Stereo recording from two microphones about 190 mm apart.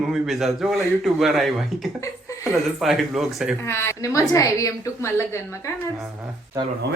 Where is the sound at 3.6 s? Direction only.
15° left (ahead or behind).